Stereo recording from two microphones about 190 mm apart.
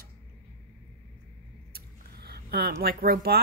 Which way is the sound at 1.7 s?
55° right (ahead or behind).